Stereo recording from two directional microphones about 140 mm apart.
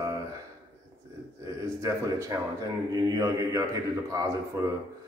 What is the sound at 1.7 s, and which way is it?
A man's voice, 20° right (ahead or behind).